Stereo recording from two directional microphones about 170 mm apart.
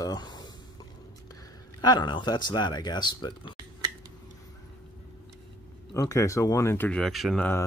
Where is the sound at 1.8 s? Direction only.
25° left (ahead or behind).